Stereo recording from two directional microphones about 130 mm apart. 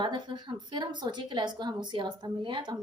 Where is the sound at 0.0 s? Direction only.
35° right (ahead or behind).